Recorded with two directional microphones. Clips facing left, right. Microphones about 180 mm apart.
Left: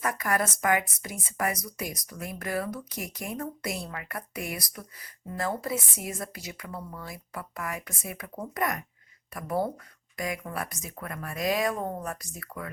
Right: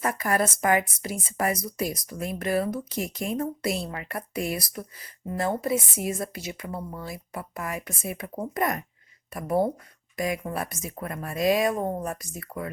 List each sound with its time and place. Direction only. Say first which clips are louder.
0.0 s a woman's voice: right 3 dB; 30° right (ahead or behind)